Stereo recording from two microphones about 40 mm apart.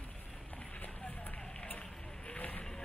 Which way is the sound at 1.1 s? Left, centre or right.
Left.